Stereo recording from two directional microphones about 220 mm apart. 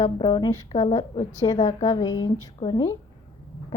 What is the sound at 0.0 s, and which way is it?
A woman's voice, 20° left (ahead or behind).